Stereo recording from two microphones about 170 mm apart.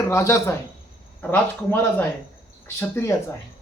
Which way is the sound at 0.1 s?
15° left (ahead or behind).